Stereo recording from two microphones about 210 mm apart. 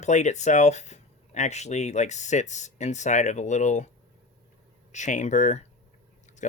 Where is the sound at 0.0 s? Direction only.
35° left (ahead or behind).